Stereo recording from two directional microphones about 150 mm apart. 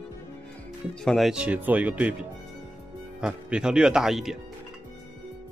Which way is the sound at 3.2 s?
5° right (ahead or behind).